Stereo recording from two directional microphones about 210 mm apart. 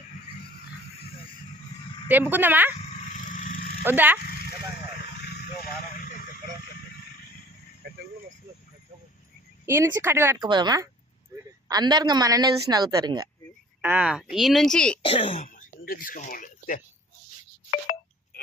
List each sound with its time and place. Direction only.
2.0 s a woman's voice: 10° right (ahead or behind)
3.2 s a sound: 40° left (ahead or behind)
3.8 s a woman's voice: 10° right (ahead or behind)
7.8 s cricket: 50° right (ahead or behind)
9.6 s a woman's voice: 10° right (ahead or behind)
13.8 s speech: 5° right (ahead or behind)
15.0 s speech: 25° left (ahead or behind)
15.4 s a sound: 40° left (ahead or behind)